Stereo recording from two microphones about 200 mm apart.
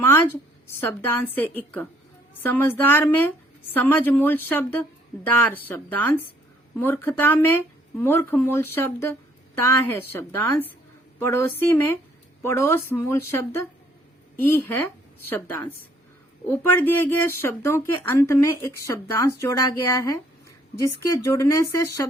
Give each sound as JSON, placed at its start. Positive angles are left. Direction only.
{"t": 0.0, "sound": "a woman's voice", "side_deg": 10}
{"t": 16.5, "sound": "a woman's voice", "side_deg": 10}